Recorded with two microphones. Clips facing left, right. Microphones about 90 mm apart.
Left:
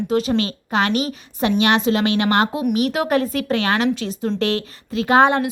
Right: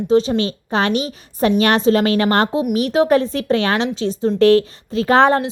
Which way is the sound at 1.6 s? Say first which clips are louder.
Right 2 dB; 40° right (ahead or behind).